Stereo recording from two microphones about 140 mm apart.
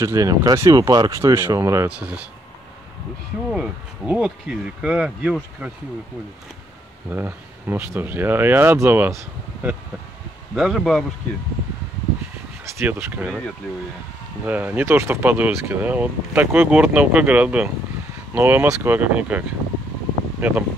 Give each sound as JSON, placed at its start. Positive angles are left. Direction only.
{"t": 0.0, "sound": "speech", "side_deg": -25}
{"t": 1.9, "sound": "speech", "side_deg": -10}
{"t": 3.4, "sound": "speech", "side_deg": -5}
{"t": 7.1, "sound": "speech", "side_deg": -15}
{"t": 12.6, "sound": "speech", "side_deg": -15}
{"t": 14.4, "sound": "speech", "side_deg": -15}